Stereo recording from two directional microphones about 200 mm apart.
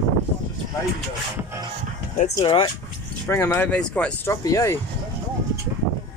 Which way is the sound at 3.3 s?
15° left (ahead or behind).